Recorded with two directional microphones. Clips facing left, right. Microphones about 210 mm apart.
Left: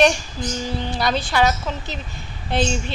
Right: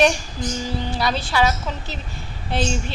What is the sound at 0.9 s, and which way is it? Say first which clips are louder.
Speech: left 2 dB; 5° right (ahead or behind).